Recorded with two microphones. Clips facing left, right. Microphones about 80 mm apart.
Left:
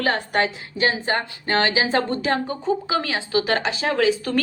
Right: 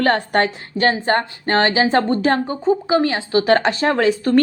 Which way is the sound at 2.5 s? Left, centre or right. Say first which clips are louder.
Right 6 dB; right.